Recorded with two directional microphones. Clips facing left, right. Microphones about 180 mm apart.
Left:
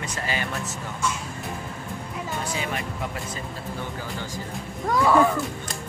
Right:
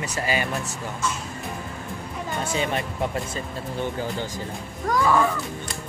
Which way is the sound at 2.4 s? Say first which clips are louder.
Right 6 dB; 25° right (ahead or behind).